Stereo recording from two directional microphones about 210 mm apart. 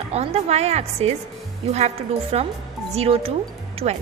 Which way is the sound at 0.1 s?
30° right (ahead or behind).